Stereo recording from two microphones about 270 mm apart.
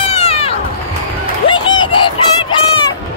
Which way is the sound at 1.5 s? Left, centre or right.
Centre.